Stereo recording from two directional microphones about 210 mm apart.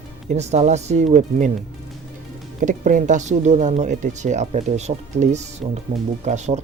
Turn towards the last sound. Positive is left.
turn(degrees=-35)  # may be behind; listen again after turning